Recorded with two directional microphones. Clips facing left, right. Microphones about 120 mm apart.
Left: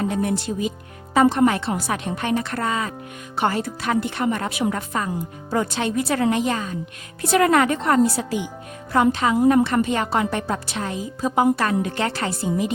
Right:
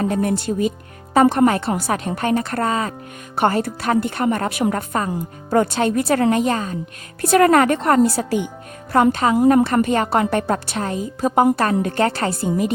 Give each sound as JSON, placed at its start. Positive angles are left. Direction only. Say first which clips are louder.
{"t": 0.0, "sound": "a woman's voice", "louder": "right 3 dB", "side_deg": -45}